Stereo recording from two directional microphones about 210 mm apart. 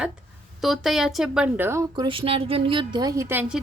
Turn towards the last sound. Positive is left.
turn(degrees=-5)  # may be behind; listen again after turning